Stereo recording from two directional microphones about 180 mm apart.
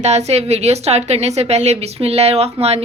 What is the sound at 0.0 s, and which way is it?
A woman's voice, 40° right (ahead or behind).